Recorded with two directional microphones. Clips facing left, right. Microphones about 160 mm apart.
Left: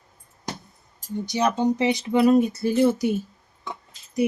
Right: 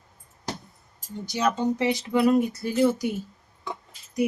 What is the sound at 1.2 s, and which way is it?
Speech, 20° left (ahead or behind).